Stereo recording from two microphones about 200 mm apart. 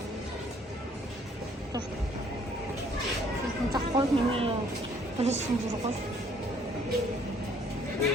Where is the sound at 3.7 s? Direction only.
25° right (ahead or behind).